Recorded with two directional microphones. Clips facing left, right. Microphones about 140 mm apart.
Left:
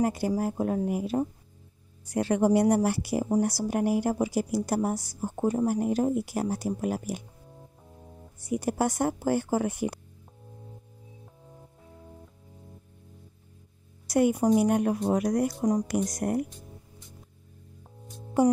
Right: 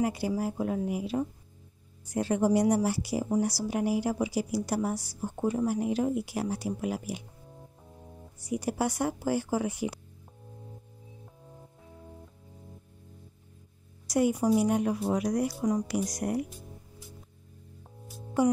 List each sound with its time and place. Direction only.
0.0 s speech: 45° left (ahead or behind)
2.0 s speech: 70° left (ahead or behind); by 7.2 s 45° left (ahead or behind)
7.9 s music: centre (ahead or behind)
8.4 s speech: 50° left (ahead or behind)
14.0 s speech: 55° left (ahead or behind)
16.4 s music: 5° right (ahead or behind)